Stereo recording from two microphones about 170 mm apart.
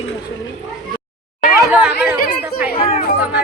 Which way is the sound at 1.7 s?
5° right (ahead or behind).